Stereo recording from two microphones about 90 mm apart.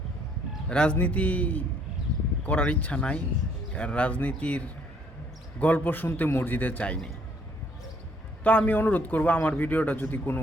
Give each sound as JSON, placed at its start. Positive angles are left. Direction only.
{"t": 0.7, "sound": "a man's voice", "side_deg": 15}
{"t": 8.4, "sound": "a man's voice", "side_deg": 15}